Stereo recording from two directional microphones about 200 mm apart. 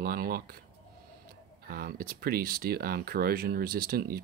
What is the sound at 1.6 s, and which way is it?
Speech, 45° right (ahead or behind).